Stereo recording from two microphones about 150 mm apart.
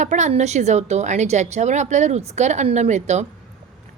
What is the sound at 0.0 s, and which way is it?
A woman's voice, 55° right (ahead or behind).